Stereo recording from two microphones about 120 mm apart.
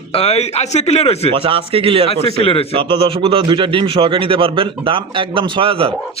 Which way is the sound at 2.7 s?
45° right (ahead or behind).